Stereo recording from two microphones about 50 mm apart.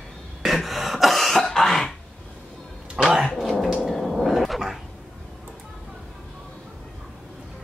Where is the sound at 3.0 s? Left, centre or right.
Centre.